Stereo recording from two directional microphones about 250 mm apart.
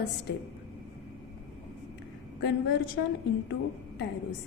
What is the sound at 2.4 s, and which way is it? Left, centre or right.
Speech, left.